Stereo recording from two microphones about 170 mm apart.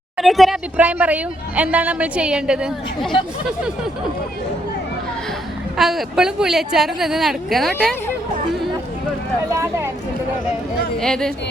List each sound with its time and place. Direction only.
0.2 s speech: centre (ahead or behind)
5.7 s speech: centre (ahead or behind)
9.6 s speech: 15° right (ahead or behind)
11.0 s speech: 5° left (ahead or behind)